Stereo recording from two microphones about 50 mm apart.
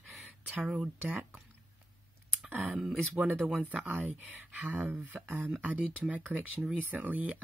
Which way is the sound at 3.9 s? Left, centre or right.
Right.